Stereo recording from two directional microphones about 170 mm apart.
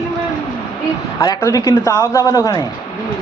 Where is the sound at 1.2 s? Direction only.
20° left (ahead or behind).